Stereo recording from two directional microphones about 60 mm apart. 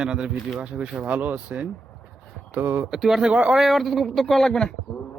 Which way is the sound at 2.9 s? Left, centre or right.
Centre.